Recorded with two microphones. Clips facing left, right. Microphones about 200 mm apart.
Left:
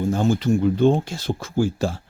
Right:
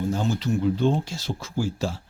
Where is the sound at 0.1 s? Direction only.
50° left (ahead or behind).